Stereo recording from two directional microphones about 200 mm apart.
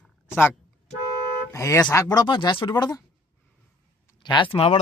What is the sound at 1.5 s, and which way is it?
Speech, 15° left (ahead or behind).